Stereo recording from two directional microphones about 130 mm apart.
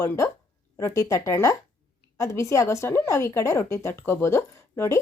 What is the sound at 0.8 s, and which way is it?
Speech, 25° left (ahead or behind).